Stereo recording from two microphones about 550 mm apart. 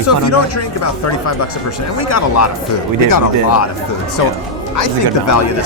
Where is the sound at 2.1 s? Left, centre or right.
Left.